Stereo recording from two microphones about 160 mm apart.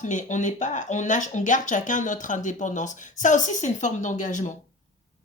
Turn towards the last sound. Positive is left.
turn(degrees=50)  # may be behind; listen again after turning